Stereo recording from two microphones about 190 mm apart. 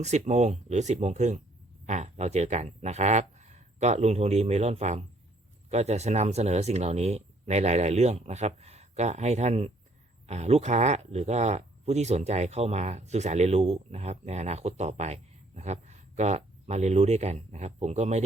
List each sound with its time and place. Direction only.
0.0 s speech: 35° right (ahead or behind)